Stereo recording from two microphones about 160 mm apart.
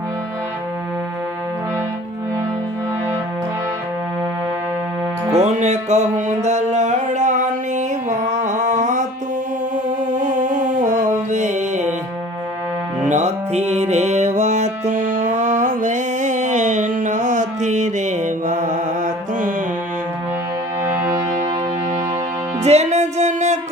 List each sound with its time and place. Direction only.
5.3 s music: 45° right (ahead or behind)
9.7 s mantra: 50° right (ahead or behind)
13.1 s music: 45° right (ahead or behind)
22.6 s music: 45° right (ahead or behind)